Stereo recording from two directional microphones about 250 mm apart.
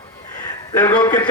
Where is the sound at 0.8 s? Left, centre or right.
Centre.